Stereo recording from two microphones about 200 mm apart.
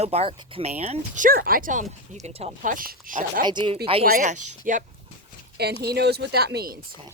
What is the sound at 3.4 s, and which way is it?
Speech, 20° right (ahead or behind).